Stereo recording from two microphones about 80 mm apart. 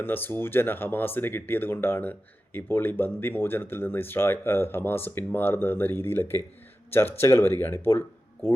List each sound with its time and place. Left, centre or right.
0.0 s speech: left